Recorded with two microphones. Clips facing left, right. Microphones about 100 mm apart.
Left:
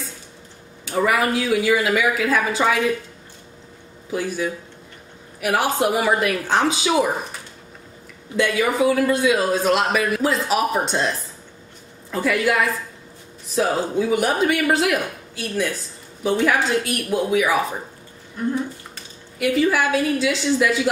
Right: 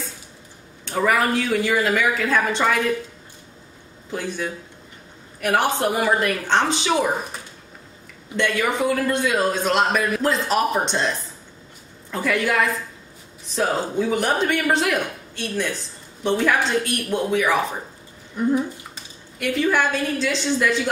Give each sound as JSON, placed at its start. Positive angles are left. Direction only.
{"t": 0.8, "sound": "speech", "side_deg": 5}
{"t": 4.1, "sound": "a woman's voice", "side_deg": 5}
{"t": 8.4, "sound": "speech", "side_deg": 5}
{"t": 18.4, "sound": "speech", "side_deg": -10}
{"t": 19.3, "sound": "speech", "side_deg": 5}